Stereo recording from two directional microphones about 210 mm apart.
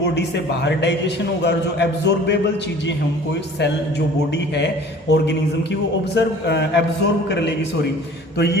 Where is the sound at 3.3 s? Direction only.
55° left (ahead or behind).